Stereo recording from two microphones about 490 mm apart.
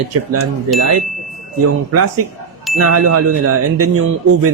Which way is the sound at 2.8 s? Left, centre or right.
Right.